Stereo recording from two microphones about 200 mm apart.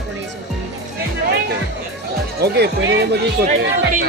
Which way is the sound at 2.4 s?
55° right (ahead or behind).